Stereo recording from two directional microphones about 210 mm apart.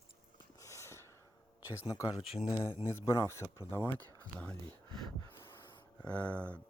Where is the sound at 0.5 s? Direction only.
15° left (ahead or behind).